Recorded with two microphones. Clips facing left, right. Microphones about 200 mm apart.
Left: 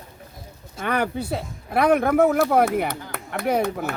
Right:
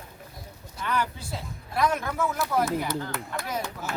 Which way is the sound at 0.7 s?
60° left (ahead or behind).